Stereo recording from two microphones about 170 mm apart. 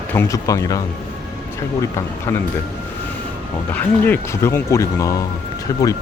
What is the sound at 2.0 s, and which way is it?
Speech, 15° left (ahead or behind).